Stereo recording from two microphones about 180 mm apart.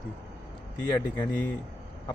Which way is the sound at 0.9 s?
25° left (ahead or behind).